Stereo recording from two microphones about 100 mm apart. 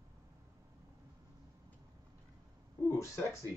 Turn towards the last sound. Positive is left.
turn(degrees=30)  # may be behind; listen again after turning